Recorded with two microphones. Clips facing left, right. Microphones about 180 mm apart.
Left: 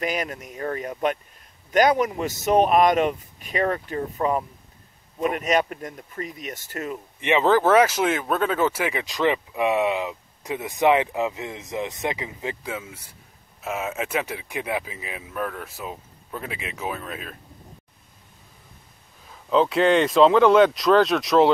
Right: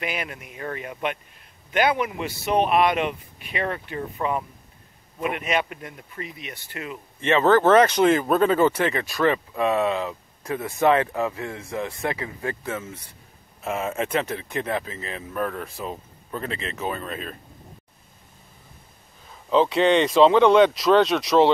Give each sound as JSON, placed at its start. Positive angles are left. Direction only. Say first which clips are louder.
{"t": 0.0, "sound": "speech", "louder": "left 4 dB", "side_deg": 40}
{"t": 7.2, "sound": "speech", "louder": "right 1 dB", "side_deg": 15}
{"t": 19.5, "sound": "speech", "louder": "even", "side_deg": 0}